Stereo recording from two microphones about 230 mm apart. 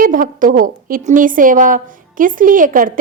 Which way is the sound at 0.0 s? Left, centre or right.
Right.